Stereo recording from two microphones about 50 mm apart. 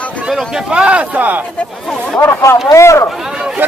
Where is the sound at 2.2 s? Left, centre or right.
Left.